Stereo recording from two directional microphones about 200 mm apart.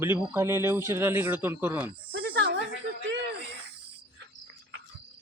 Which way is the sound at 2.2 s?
55° right (ahead or behind).